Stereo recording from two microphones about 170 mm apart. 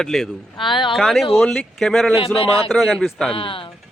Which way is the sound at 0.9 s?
Centre (ahead or behind).